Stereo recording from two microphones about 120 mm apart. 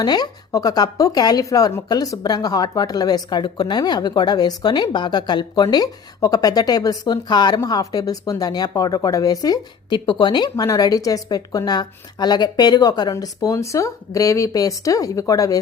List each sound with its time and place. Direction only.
0.0 s speech: 35° left (ahead or behind)